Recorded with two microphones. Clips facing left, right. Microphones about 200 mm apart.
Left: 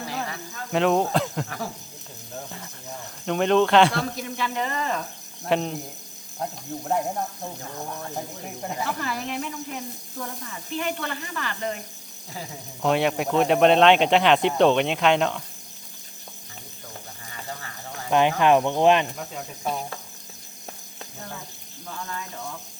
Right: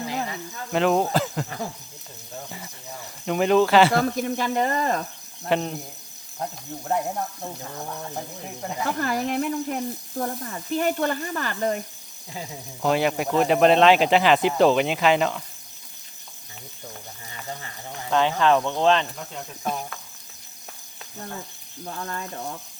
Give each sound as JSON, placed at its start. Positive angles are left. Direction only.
{"t": 0.7, "sound": "speech", "side_deg": 0}
{"t": 2.5, "sound": "speech", "side_deg": -5}
{"t": 3.9, "sound": "speech", "side_deg": -50}
{"t": 5.4, "sound": "speech", "side_deg": 0}
{"t": 9.0, "sound": "speech", "side_deg": -45}
{"t": 10.2, "sound": "speech", "side_deg": -40}
{"t": 12.8, "sound": "speech", "side_deg": 0}
{"t": 18.1, "sound": "cricket", "side_deg": 15}
{"t": 22.0, "sound": "speech", "side_deg": -40}